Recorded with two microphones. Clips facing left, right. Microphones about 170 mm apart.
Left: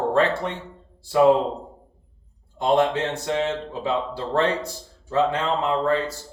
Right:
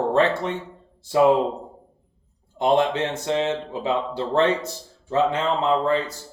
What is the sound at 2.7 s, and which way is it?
Speech, 20° right (ahead or behind).